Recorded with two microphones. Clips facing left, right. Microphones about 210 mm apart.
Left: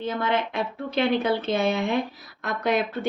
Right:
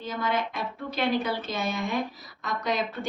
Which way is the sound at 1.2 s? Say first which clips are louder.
Left 7 dB; 60° left (ahead or behind).